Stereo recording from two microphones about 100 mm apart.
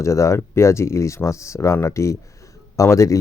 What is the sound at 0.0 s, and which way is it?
Speech, 30° left (ahead or behind).